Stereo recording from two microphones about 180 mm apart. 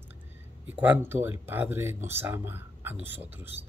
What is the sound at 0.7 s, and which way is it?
Speech, 10° right (ahead or behind).